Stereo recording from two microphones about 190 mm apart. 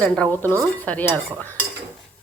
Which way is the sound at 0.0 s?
10° left (ahead or behind).